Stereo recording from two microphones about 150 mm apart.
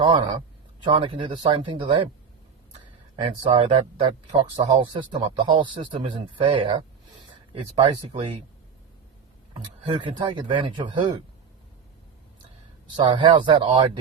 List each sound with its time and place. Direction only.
0.0 s speech: 30° right (ahead or behind)
3.2 s speech: 35° right (ahead or behind)
9.9 s speech: 30° right (ahead or behind)
13.0 s speech: 30° right (ahead or behind)